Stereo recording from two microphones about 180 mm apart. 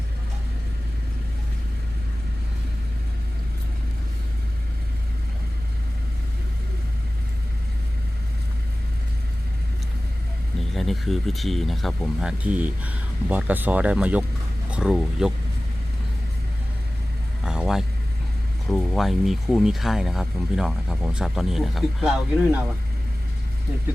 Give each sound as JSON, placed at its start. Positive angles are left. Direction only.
{"t": 10.8, "sound": "speech", "side_deg": 0}
{"t": 17.4, "sound": "vehicle", "side_deg": -5}
{"t": 18.7, "sound": "speech", "side_deg": 0}